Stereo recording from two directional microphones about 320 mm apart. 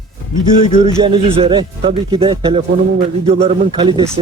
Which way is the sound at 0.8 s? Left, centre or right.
Centre.